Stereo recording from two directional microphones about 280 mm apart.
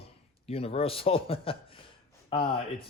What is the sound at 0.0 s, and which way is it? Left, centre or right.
Speech, left.